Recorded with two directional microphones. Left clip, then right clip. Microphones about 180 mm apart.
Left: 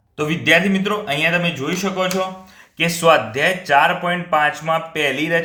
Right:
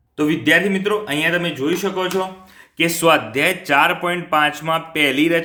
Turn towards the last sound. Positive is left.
turn(degrees=-30)  # may be behind; listen again after turning